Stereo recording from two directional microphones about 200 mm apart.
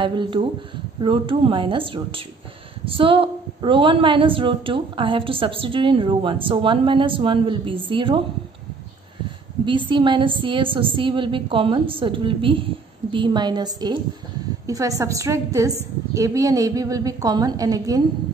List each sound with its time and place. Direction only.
0.0 s a woman's voice: 25° right (ahead or behind)
9.7 s a woman's voice: 25° right (ahead or behind)